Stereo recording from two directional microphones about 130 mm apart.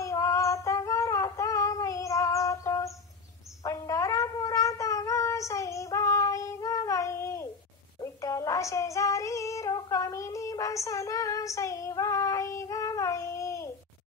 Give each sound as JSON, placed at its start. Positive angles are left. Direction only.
{"t": 0.0, "sound": "humming", "side_deg": 25}
{"t": 3.6, "sound": "cat", "side_deg": 25}
{"t": 8.0, "sound": "music", "side_deg": 25}